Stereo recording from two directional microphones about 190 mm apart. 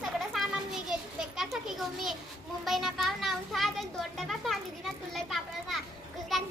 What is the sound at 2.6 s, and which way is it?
Children playing, centre (ahead or behind).